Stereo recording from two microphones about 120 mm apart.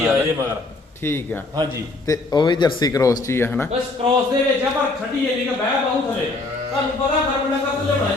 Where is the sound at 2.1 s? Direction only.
35° left (ahead or behind).